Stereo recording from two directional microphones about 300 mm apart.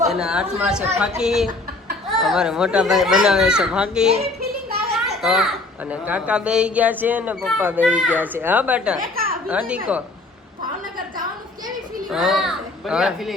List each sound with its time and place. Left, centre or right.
0.1 s speech: centre
4.4 s a sound: right
5.2 s speech: centre
9.0 s a sound: right
9.5 s speech: centre
12.1 s speech: centre